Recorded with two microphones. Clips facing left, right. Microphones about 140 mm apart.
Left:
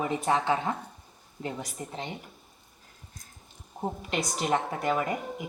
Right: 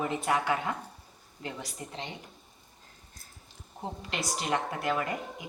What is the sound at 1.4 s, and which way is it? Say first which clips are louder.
Speech: left 4 dB; 40° left (ahead or behind).